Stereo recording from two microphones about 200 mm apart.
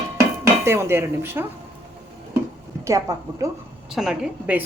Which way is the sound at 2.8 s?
15° right (ahead or behind).